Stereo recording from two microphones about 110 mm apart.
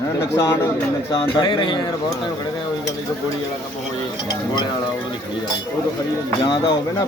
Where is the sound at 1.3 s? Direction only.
45° left (ahead or behind).